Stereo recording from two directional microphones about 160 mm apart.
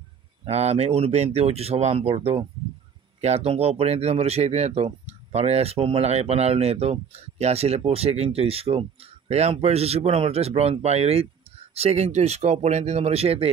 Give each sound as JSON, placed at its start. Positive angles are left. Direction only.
{"t": 0.5, "sound": "speech", "side_deg": -40}